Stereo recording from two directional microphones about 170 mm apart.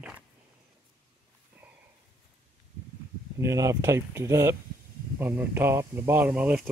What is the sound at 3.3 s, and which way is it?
Speech, 20° right (ahead or behind).